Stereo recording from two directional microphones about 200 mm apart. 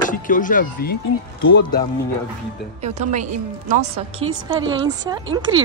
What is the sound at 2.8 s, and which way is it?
A woman's voice, 35° right (ahead or behind).